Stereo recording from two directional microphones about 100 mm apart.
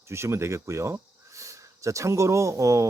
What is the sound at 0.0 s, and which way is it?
Speech, 25° right (ahead or behind).